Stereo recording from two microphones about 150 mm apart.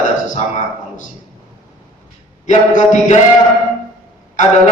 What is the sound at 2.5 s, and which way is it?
Speech, 55° left (ahead or behind).